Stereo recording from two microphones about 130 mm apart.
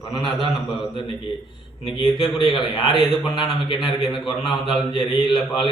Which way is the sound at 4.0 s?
Centre (ahead or behind).